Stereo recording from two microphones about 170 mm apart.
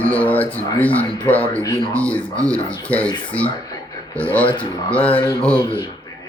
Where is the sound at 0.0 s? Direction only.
10° left (ahead or behind).